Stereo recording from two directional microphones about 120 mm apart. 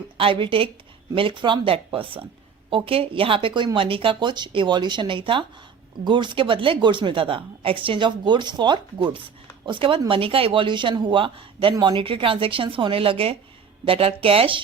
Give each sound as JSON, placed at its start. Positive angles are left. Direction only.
{"t": 0.2, "sound": "a woman's voice", "side_deg": -45}